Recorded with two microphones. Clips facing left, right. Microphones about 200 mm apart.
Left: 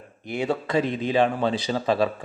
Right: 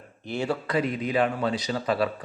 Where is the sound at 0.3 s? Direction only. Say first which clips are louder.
Left 2 dB; 20° left (ahead or behind).